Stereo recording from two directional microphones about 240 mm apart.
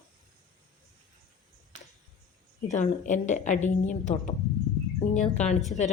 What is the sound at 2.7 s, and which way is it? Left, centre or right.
A woman's voice, left.